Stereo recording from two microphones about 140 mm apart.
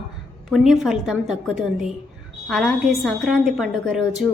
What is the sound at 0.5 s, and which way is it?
A woman's voice, centre (ahead or behind).